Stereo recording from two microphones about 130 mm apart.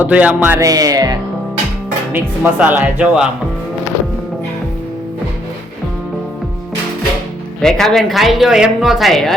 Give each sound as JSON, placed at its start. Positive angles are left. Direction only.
{"t": 0.0, "sound": "speech", "side_deg": -10}
{"t": 0.6, "sound": "speech", "side_deg": -30}
{"t": 2.1, "sound": "speech", "side_deg": -15}
{"t": 7.6, "sound": "speech", "side_deg": 5}